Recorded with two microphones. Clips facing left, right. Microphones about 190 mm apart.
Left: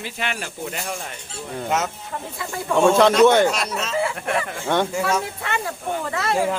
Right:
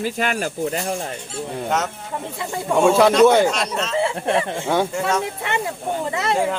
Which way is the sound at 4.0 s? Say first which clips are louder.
Right 4 dB; 25° right (ahead or behind).